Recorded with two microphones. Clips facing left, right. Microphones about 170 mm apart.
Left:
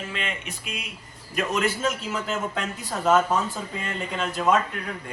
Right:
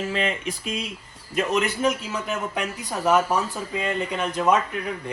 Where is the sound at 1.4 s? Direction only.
20° right (ahead or behind).